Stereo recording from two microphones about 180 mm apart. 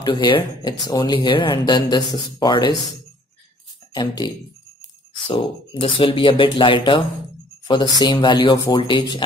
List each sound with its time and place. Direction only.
0.0 s speech: 25° left (ahead or behind)
3.9 s speech: 25° left (ahead or behind)